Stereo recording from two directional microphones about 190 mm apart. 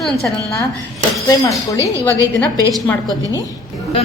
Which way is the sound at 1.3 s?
15° left (ahead or behind).